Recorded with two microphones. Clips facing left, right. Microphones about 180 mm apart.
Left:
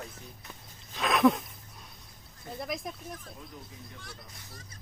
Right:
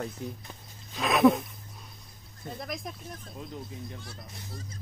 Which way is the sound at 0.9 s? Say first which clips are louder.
Right 2 dB; 5° right (ahead or behind).